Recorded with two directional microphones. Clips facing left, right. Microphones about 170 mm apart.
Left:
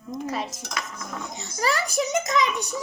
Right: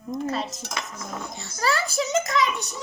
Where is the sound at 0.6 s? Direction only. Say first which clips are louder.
Even; 25° right (ahead or behind).